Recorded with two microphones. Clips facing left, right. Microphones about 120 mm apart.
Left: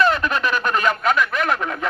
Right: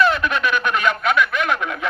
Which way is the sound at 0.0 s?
40° left (ahead or behind).